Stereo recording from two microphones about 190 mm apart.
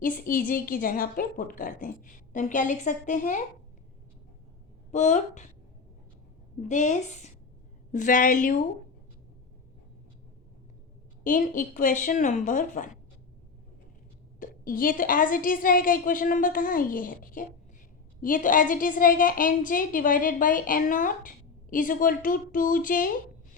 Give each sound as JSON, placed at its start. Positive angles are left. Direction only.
{"t": 0.0, "sound": "a woman's voice", "side_deg": 50}
{"t": 4.9, "sound": "a woman's voice", "side_deg": 40}
{"t": 6.6, "sound": "a woman's voice", "side_deg": 40}
{"t": 11.2, "sound": "a woman's voice", "side_deg": 45}
{"t": 14.3, "sound": "a woman's voice", "side_deg": 50}